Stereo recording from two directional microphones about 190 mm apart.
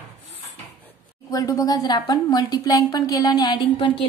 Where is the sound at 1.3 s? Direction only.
20° left (ahead or behind).